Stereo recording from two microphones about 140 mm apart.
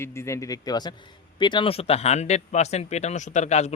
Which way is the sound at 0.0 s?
20° left (ahead or behind).